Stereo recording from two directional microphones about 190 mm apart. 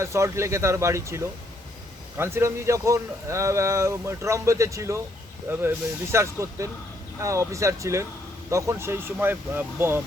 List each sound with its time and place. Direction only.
0.0 s speech: 15° right (ahead or behind)